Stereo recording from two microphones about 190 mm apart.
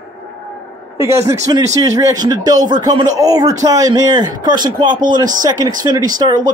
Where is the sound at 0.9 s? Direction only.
15° right (ahead or behind).